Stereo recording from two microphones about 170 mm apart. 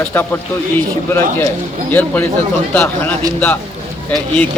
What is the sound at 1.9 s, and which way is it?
Speech, 10° left (ahead or behind).